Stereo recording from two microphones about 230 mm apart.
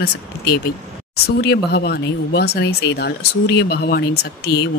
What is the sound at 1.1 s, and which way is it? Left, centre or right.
Speech, left.